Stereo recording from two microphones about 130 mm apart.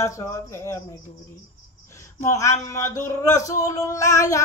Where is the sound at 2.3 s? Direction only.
25° left (ahead or behind).